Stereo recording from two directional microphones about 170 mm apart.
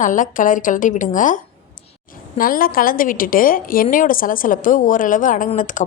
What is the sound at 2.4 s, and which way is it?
A woman's voice, 55° left (ahead or behind).